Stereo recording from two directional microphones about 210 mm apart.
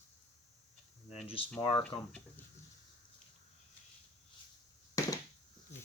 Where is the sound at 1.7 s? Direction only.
5° left (ahead or behind).